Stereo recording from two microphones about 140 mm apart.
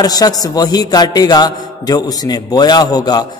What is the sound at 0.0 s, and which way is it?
A man's voice, 25° left (ahead or behind).